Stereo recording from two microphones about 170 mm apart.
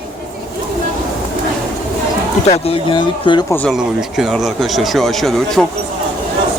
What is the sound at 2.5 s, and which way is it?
Speech, 30° left (ahead or behind).